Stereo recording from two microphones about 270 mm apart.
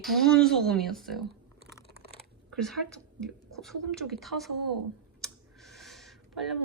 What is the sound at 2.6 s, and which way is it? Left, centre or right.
A woman's voice, centre.